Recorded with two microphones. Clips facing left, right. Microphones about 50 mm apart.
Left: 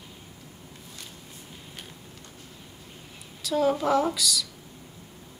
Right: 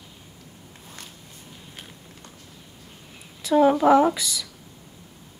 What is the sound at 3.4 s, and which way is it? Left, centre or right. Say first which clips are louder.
Speech: right 7 dB; right.